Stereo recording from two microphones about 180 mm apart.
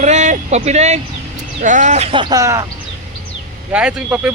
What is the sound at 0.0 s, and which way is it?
Speech, 40° right (ahead or behind).